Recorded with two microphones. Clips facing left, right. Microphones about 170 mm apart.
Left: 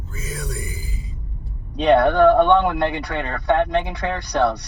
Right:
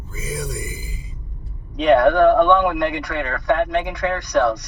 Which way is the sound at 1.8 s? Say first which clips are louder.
Right 1 dB; 30° left (ahead or behind).